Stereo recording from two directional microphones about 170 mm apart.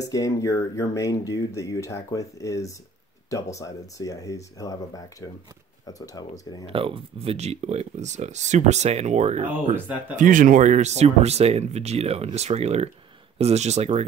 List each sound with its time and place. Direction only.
0.0 s speech: 20° left (ahead or behind)
6.7 s speech: 30° right (ahead or behind)
9.5 s speech: 10° right (ahead or behind)
10.1 s speech: 50° right (ahead or behind)